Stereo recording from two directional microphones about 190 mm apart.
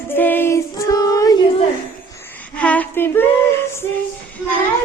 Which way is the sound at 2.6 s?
5° left (ahead or behind).